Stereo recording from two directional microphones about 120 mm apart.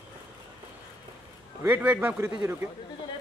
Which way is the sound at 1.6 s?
15° right (ahead or behind).